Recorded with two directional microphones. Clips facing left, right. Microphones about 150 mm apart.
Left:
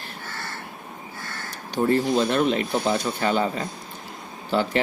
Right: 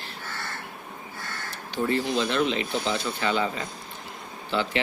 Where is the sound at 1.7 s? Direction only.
45° left (ahead or behind).